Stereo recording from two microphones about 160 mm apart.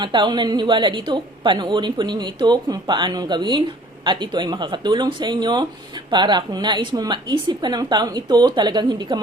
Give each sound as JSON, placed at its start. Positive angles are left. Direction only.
{"t": 0.0, "sound": "a woman's voice", "side_deg": -30}